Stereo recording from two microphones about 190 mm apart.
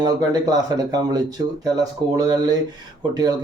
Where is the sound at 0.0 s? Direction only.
20° right (ahead or behind).